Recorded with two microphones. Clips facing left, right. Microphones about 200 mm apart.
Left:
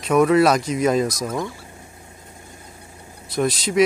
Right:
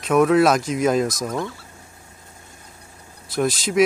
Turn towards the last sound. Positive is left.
turn(degrees=0)  # may be behind; listen again after turning